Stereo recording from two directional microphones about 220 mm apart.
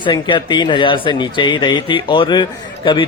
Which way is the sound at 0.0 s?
20° left (ahead or behind).